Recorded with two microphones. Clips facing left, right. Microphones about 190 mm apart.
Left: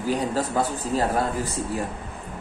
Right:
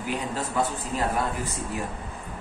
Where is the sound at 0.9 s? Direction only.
35° left (ahead or behind).